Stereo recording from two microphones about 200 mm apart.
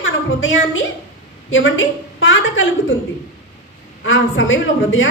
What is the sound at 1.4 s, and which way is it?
A woman's voice, 75° left (ahead or behind).